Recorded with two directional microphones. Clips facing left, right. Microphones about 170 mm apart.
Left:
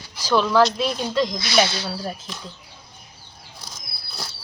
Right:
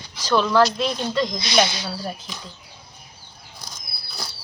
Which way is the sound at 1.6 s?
15° right (ahead or behind).